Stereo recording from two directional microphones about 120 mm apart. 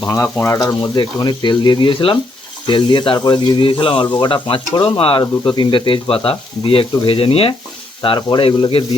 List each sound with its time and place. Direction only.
0.3 s speech: 20° left (ahead or behind); by 8.8 s 50° left (ahead or behind)